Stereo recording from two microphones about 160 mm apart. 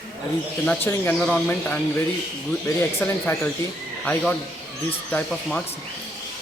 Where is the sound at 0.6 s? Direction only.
10° left (ahead or behind).